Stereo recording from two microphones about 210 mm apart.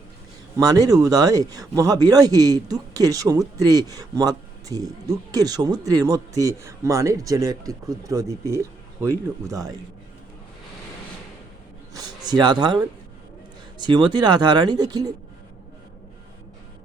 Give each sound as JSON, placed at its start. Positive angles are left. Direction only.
{"t": 0.6, "sound": "speech", "side_deg": -15}
{"t": 11.9, "sound": "a sound", "side_deg": -20}
{"t": 13.7, "sound": "speech", "side_deg": -20}